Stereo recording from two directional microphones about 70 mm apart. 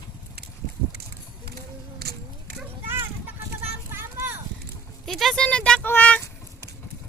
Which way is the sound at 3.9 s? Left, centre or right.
Right.